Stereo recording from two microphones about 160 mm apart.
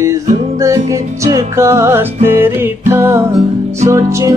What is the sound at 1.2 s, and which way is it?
Music, 20° right (ahead or behind).